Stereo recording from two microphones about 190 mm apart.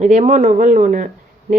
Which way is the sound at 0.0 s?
40° right (ahead or behind).